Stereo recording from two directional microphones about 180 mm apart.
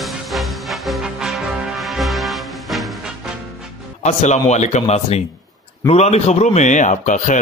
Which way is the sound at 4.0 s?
40° left (ahead or behind).